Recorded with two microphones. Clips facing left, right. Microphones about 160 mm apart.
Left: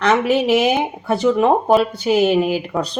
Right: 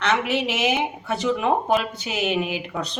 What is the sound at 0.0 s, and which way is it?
Speech, 40° left (ahead or behind).